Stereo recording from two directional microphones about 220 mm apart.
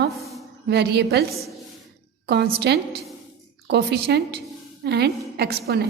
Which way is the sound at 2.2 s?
45° right (ahead or behind).